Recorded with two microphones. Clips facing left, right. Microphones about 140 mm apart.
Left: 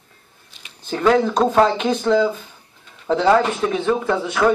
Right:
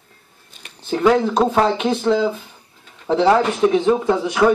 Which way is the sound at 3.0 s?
15° right (ahead or behind).